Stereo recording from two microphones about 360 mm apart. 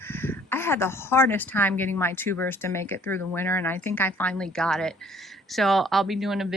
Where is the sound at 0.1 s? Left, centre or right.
Centre.